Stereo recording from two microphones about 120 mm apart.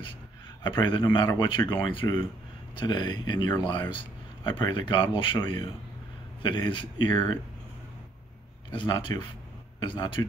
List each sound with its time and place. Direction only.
0.7 s speech: 45° left (ahead or behind)
8.7 s speech: 40° left (ahead or behind)